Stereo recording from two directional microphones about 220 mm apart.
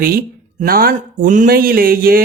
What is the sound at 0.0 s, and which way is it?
A man's voice, 40° right (ahead or behind).